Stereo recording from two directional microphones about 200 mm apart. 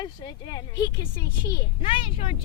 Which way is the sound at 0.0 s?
20° left (ahead or behind).